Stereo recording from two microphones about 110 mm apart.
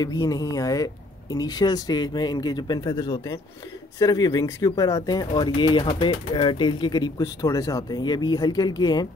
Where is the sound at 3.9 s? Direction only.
35° left (ahead or behind).